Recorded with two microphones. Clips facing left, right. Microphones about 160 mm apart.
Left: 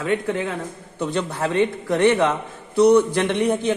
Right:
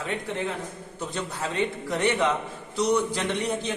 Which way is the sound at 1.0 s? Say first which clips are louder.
Left 8 dB; 65° left (ahead or behind).